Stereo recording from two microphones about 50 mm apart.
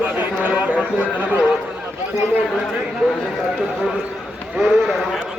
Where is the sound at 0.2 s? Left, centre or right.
Right.